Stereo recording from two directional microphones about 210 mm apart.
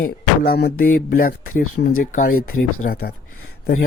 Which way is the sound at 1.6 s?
90° left.